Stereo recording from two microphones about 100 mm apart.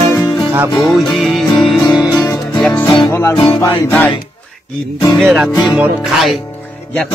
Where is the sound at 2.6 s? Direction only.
20° left (ahead or behind).